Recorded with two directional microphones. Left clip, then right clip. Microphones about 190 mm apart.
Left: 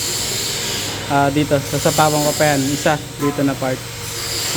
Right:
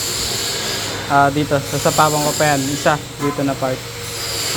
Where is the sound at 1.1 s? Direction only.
20° left (ahead or behind).